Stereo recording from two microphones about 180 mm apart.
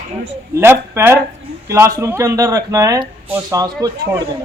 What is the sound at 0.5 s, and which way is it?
A man's voice, 15° right (ahead or behind).